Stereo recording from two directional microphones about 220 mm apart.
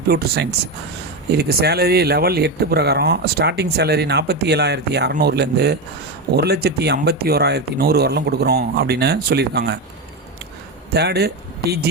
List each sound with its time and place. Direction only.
0.1 s speech: 45° right (ahead or behind)
10.9 s speech: 45° right (ahead or behind)